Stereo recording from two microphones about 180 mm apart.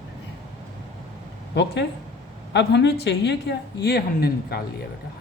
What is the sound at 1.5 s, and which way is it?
A woman's voice, 75° left (ahead or behind).